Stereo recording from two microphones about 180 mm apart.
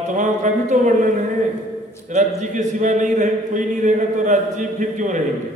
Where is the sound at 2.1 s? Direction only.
40° right (ahead or behind).